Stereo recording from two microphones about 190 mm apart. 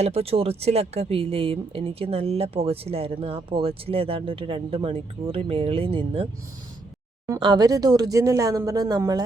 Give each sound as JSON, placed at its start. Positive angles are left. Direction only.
{"t": 0.0, "sound": "speech", "side_deg": -30}
{"t": 7.3, "sound": "speech", "side_deg": -25}